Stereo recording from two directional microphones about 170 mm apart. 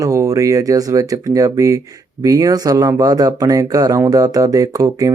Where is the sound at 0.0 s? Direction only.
20° right (ahead or behind).